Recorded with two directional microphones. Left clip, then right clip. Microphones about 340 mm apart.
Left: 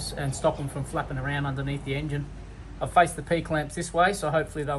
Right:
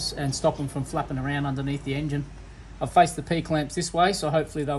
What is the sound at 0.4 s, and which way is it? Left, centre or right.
Speech, right.